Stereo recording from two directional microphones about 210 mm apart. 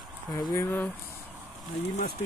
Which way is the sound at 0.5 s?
10° left (ahead or behind).